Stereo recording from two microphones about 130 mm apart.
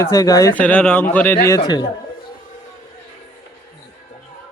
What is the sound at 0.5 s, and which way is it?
Speech, 10° left (ahead or behind).